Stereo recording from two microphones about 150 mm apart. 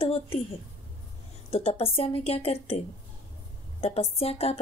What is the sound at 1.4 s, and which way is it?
A woman's voice, 40° left (ahead or behind).